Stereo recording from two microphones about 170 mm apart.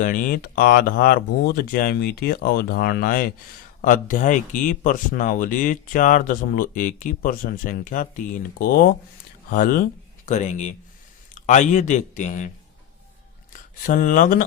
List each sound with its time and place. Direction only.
0.0 s speech: 55° left (ahead or behind)
10.2 s speech: 45° left (ahead or behind)
13.5 s speech: 50° left (ahead or behind)